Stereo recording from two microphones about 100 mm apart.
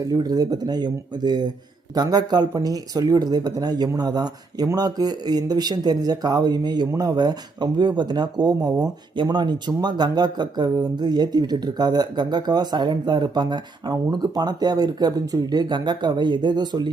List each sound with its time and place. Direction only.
0.0 s speech: 40° right (ahead or behind)